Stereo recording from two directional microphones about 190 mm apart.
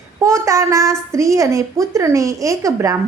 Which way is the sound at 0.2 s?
15° right (ahead or behind).